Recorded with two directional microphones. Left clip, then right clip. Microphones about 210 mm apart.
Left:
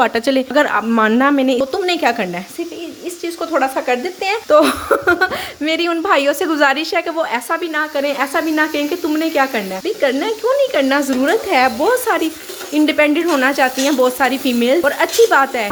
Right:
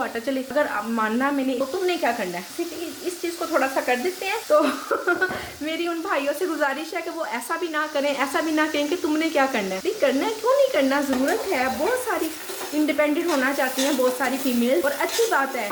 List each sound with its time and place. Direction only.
0.0 s speech: 55° left (ahead or behind)
3.5 s speech: 45° left (ahead or behind)